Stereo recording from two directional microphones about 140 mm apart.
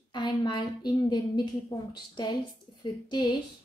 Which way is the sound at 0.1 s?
30° left (ahead or behind).